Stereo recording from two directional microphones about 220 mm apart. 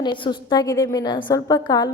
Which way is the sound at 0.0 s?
20° left (ahead or behind).